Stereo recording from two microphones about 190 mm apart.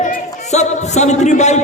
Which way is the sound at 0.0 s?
40° left (ahead or behind).